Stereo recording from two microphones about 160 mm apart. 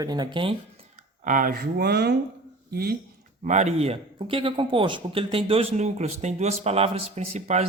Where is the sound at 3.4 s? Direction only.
50° right (ahead or behind).